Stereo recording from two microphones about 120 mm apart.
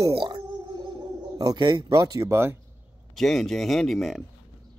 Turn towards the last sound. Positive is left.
turn(degrees=0)  # may be behind; listen again after turning